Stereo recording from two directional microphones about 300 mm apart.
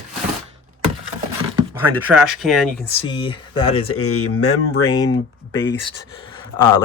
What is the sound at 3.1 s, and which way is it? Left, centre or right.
Speech, centre.